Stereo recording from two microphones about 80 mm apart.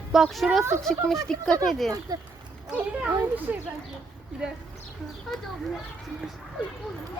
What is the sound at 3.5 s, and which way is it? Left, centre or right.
Speech, centre.